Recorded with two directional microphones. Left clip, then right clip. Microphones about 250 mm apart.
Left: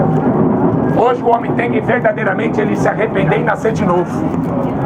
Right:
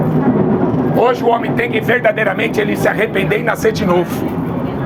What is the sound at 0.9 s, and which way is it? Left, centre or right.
Speech, right.